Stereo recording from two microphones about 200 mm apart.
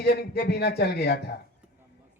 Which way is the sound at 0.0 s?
55° left (ahead or behind).